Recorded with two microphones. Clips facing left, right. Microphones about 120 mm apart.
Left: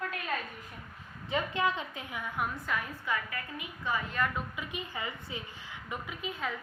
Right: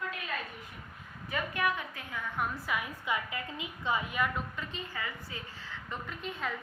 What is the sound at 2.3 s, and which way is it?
Speech, 5° right (ahead or behind).